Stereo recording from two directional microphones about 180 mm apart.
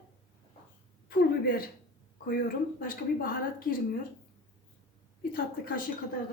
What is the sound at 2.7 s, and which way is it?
A woman's voice, 55° left (ahead or behind).